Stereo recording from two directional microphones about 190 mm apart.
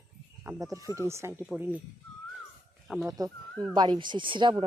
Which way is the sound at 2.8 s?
Centre (ahead or behind).